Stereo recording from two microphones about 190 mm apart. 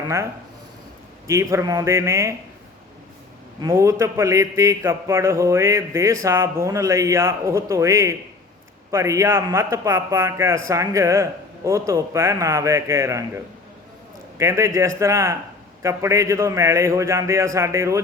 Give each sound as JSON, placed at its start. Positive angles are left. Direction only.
{"t": 1.3, "sound": "a man's voice", "side_deg": -15}
{"t": 3.6, "sound": "a man's voice", "side_deg": -15}